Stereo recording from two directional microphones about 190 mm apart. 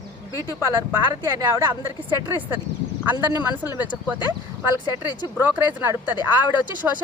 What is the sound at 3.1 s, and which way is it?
Speech, 20° right (ahead or behind).